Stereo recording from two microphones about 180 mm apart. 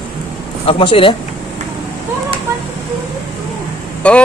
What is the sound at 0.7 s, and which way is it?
Speech, 30° left (ahead or behind).